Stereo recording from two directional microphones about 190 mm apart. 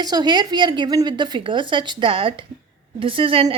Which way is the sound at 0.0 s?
20° right (ahead or behind).